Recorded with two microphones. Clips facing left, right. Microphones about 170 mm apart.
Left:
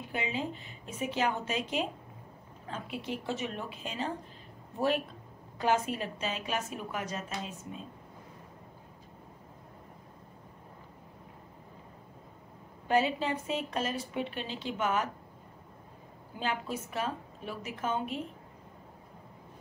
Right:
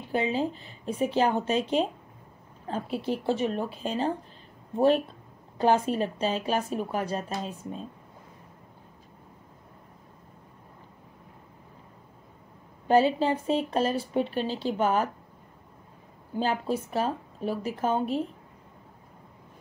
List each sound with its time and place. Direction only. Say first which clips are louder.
0.1 s speech: right 8 dB; 35° right (ahead or behind)
12.8 s speech: right 7 dB; 35° right (ahead or behind)
16.3 s speech: right 7 dB; 35° right (ahead or behind)